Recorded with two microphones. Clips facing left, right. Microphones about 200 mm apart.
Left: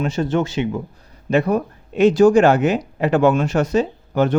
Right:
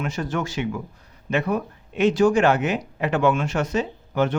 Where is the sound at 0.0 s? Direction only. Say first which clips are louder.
Left 7 dB; 25° left (ahead or behind).